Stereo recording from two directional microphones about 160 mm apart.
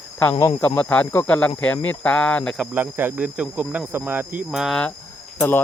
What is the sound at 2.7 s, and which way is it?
Cricket, 15° right (ahead or behind).